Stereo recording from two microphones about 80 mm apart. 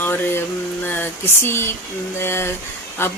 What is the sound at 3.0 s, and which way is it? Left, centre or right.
Speech, left.